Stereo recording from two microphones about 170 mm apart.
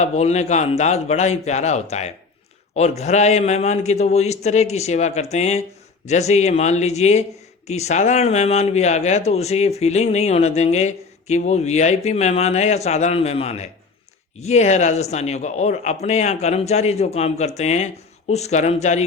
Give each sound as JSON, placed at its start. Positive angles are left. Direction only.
{"t": 0.0, "sound": "speech", "side_deg": 40}